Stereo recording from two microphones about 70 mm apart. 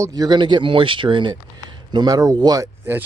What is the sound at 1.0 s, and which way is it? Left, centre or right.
Speech, right.